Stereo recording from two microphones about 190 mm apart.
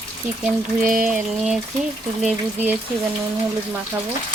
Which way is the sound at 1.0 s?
5° right (ahead or behind).